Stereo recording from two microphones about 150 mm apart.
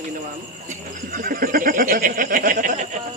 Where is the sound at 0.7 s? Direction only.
70° right (ahead or behind).